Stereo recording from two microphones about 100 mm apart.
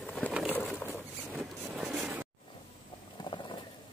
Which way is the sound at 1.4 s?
5° right (ahead or behind).